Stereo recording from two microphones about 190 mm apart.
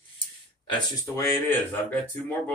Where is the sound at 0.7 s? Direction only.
20° left (ahead or behind).